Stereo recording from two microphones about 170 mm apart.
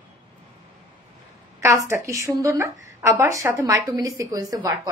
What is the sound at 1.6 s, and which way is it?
A woman's voice, 15° right (ahead or behind).